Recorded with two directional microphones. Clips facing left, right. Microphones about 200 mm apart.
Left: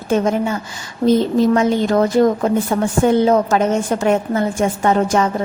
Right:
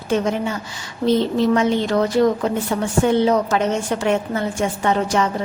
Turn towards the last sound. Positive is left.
turn(degrees=50)  # may be behind; listen again after turning